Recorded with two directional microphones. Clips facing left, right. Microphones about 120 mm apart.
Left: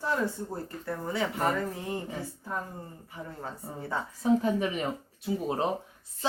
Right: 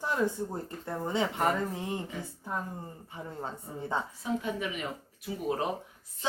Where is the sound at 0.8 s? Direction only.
20° right (ahead or behind).